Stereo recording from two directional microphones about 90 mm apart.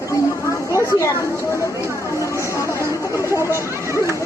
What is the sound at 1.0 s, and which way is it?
Speech, 35° left (ahead or behind).